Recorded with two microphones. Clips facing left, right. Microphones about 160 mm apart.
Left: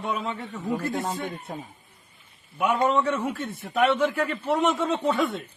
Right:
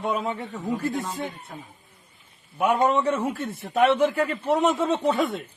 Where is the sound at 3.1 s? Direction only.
35° right (ahead or behind).